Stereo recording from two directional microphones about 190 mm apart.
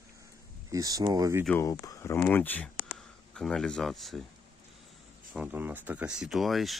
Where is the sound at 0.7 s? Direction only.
20° right (ahead or behind).